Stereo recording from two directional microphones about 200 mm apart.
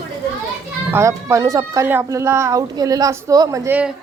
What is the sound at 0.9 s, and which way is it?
Speech, 15° right (ahead or behind).